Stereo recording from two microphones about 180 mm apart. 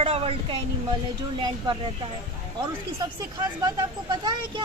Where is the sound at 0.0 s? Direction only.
30° right (ahead or behind).